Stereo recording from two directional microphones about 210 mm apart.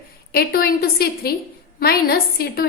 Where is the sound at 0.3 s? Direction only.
45° left (ahead or behind).